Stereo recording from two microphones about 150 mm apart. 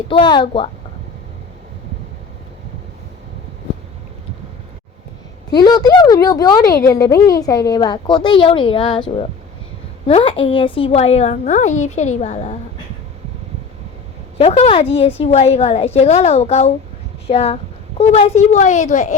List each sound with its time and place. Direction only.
0.1 s speech: 30° left (ahead or behind)
5.5 s a woman's voice: 30° left (ahead or behind); by 12.5 s 50° left (ahead or behind)
14.3 s a woman's voice: 45° left (ahead or behind)